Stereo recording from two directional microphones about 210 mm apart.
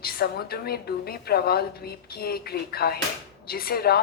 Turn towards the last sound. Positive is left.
turn(degrees=45)  # may be behind; listen again after turning